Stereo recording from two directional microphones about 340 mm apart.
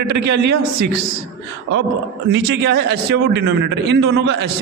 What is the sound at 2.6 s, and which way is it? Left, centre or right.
A man's voice, right.